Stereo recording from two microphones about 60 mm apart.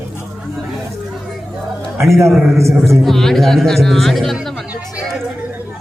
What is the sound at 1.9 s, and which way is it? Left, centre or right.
Speech, right.